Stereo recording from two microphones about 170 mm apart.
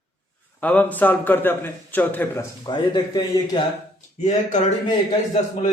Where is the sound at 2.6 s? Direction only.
25° left (ahead or behind).